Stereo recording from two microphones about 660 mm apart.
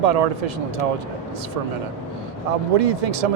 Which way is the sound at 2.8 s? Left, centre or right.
Right.